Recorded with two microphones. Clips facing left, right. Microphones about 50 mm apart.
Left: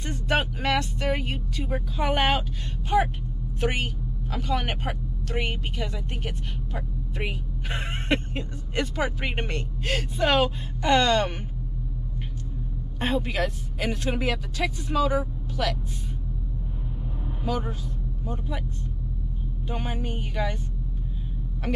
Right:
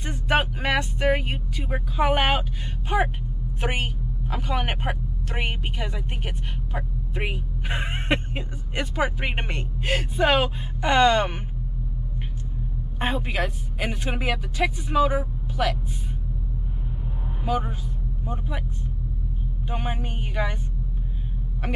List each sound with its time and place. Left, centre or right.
0.0 s vehicle: centre
2.9 s a woman's voice: right
13.0 s speech: centre
17.5 s speech: centre
19.7 s speech: centre
21.6 s a woman's voice: centre